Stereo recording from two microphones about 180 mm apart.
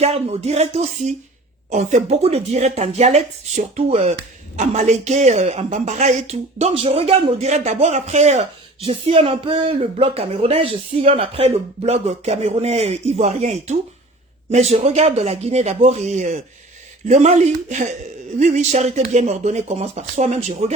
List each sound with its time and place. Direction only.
0.0 s speech: 35° right (ahead or behind)